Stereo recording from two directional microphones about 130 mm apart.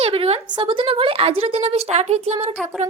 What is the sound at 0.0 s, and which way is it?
A woman's voice, 45° right (ahead or behind).